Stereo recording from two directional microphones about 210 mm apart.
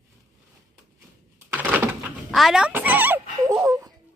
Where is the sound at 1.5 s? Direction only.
10° right (ahead or behind).